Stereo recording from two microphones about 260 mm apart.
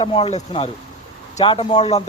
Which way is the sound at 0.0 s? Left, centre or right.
Centre.